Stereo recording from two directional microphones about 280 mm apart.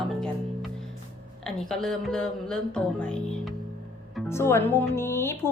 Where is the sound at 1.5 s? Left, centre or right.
Centre.